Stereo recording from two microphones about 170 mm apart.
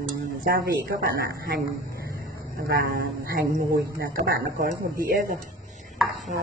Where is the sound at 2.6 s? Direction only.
60° right (ahead or behind).